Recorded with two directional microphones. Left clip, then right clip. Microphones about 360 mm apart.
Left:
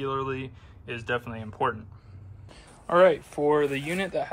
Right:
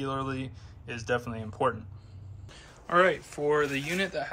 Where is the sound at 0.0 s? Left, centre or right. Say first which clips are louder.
Left 3 dB; centre.